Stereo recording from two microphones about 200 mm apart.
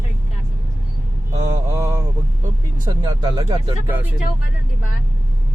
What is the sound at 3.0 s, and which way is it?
Speech, 20° right (ahead or behind).